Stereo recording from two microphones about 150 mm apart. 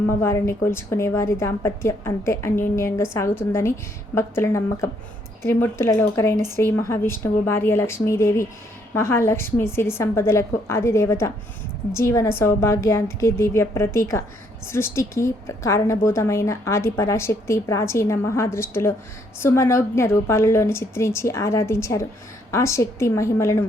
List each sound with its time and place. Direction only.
0.1 s a woman's voice: 15° left (ahead or behind)